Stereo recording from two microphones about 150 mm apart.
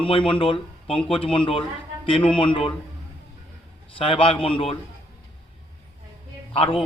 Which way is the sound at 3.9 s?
35° left (ahead or behind).